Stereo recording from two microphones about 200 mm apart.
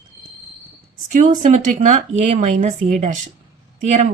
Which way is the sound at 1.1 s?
35° right (ahead or behind).